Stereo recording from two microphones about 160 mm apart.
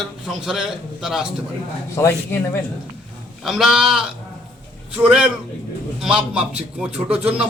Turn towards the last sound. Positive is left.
turn(degrees=-5)  # may be behind; listen again after turning